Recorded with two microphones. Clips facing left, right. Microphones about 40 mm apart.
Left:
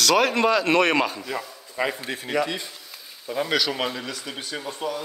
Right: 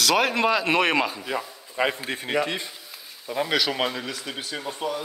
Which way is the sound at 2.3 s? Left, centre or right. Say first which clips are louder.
Even; right.